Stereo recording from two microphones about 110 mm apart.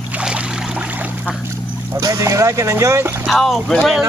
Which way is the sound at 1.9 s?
30° right (ahead or behind).